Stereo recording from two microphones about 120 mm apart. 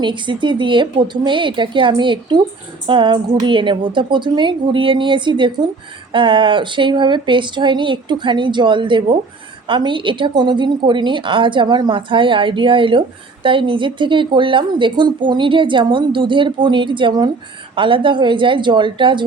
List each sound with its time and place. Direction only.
0.0 s a woman's voice: 40° right (ahead or behind)